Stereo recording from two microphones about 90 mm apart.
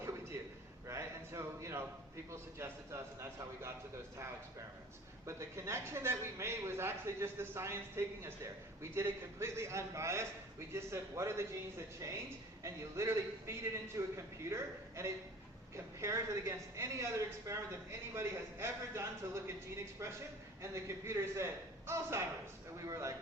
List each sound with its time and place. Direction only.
0.0 s a sound: 30° right (ahead or behind)
2.3 s a man's voice: 30° right (ahead or behind)
5.2 s a man's voice: 30° right (ahead or behind)